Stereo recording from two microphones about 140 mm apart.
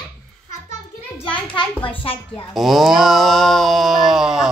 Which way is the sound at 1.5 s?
40° left (ahead or behind).